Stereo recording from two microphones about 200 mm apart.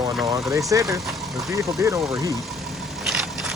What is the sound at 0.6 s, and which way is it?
Speech, 15° right (ahead or behind).